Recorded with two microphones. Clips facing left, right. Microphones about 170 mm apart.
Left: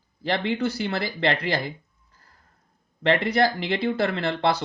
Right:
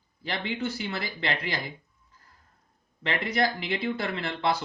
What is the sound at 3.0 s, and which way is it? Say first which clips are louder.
Speech: left 6 dB; 35° left (ahead or behind).